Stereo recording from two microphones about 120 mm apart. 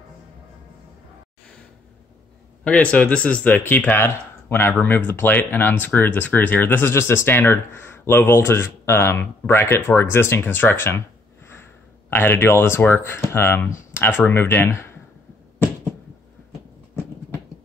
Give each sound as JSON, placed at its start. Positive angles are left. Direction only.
{"t": 2.6, "sound": "speech", "side_deg": 10}